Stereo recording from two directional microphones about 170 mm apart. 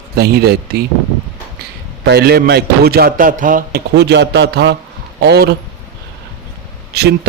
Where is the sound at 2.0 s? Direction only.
70° right (ahead or behind).